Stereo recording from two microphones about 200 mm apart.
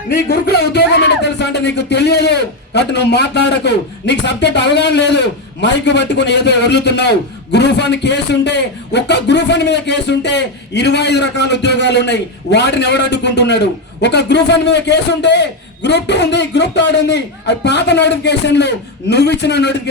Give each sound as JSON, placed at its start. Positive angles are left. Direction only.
{"t": 0.1, "sound": "speech", "side_deg": 55}